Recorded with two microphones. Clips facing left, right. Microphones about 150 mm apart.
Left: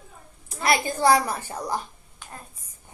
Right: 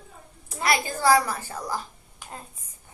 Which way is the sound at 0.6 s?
25° left (ahead or behind).